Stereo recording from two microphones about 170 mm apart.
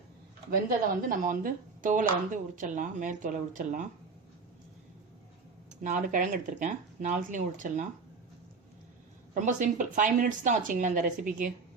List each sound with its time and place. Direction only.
1.0 s speech: 55° right (ahead or behind)
5.8 s speech: 50° right (ahead or behind)
9.3 s speech: 50° right (ahead or behind)